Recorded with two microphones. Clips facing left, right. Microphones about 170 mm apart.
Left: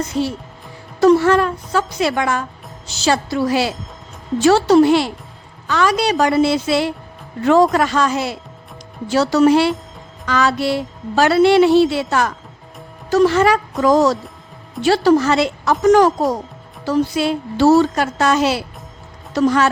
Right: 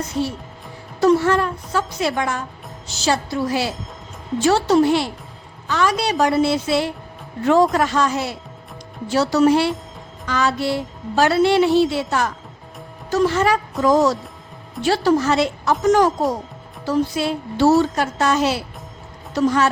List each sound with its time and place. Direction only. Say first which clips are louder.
0.1 s a woman's voice: left 3 dB; 90° left